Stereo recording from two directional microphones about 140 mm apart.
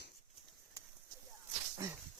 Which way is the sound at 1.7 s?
20° right (ahead or behind).